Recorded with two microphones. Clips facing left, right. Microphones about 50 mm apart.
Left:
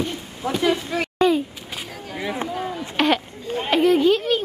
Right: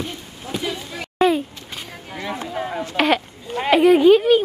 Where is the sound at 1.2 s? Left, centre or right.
Centre.